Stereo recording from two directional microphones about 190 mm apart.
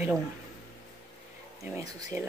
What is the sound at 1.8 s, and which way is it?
Speech, 15° right (ahead or behind).